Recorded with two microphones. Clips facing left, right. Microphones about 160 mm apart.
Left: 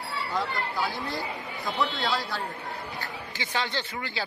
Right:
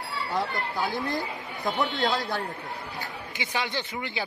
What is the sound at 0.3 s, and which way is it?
Speech, 20° right (ahead or behind).